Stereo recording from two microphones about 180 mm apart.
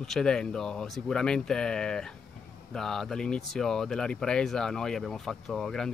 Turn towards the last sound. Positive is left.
turn(degrees=0)  # may be behind; listen again after turning